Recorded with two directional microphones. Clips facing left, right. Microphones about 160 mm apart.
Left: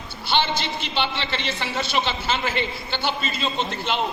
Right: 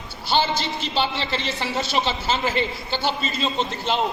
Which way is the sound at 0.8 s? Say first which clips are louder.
Right 2 dB; 40° right (ahead or behind).